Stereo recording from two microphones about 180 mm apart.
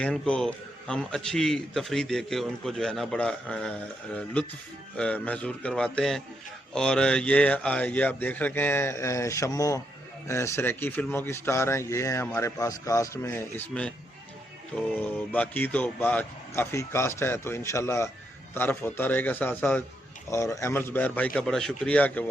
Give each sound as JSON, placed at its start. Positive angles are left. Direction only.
{"t": 0.0, "sound": "a man's voice", "side_deg": 5}
{"t": 14.9, "sound": "speech", "side_deg": 10}